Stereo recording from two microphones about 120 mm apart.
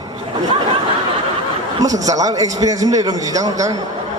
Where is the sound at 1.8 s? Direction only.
30° right (ahead or behind).